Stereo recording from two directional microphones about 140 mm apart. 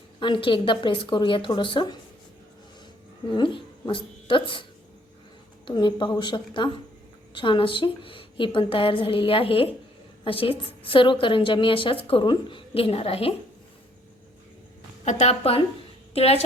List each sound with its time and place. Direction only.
0.2 s a woman's voice: 35° left (ahead or behind)
3.3 s speech: 35° left (ahead or behind)
5.6 s a woman's voice: 35° left (ahead or behind)
15.0 s a woman's voice: 50° left (ahead or behind)